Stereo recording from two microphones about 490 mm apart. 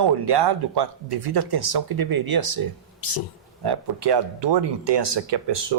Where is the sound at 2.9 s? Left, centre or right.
Left.